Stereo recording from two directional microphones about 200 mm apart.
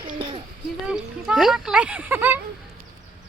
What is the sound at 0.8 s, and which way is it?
Speech, 5° right (ahead or behind).